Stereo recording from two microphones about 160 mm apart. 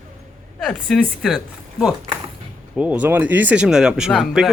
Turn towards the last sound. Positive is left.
turn(degrees=0)  # may be behind; listen again after turning